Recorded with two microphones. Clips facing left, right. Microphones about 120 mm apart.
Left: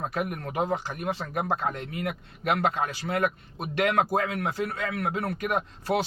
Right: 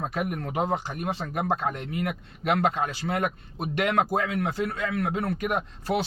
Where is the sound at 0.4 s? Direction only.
25° right (ahead or behind).